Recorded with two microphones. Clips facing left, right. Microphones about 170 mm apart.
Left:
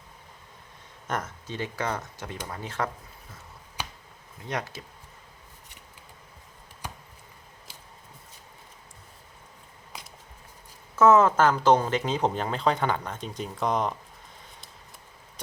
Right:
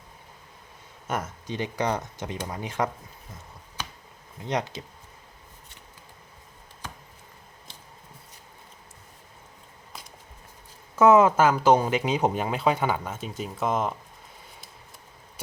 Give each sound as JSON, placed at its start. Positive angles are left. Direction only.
{"t": 1.0, "sound": "speech", "side_deg": -10}
{"t": 4.4, "sound": "speech", "side_deg": -20}
{"t": 10.9, "sound": "speech", "side_deg": -15}